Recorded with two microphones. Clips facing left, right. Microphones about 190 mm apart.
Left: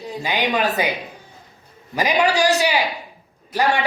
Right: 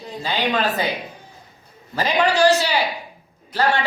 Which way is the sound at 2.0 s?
15° left (ahead or behind).